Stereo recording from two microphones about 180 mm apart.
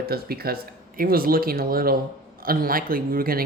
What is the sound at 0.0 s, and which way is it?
Speech, 60° right (ahead or behind).